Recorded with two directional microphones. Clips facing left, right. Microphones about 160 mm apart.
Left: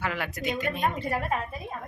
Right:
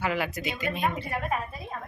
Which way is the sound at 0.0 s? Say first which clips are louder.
Right 2 dB; centre (ahead or behind).